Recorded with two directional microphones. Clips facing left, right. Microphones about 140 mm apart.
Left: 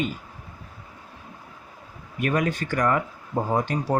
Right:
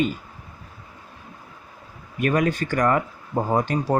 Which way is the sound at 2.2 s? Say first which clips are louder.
Right 3 dB; 45° right (ahead or behind).